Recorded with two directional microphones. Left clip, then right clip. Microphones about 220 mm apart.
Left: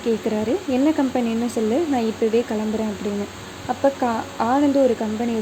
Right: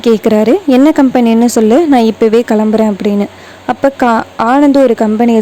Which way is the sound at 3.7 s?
45° right (ahead or behind).